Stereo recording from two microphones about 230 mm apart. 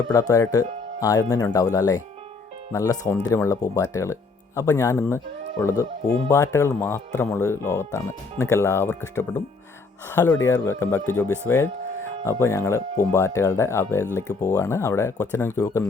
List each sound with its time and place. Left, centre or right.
0.1 s speech: centre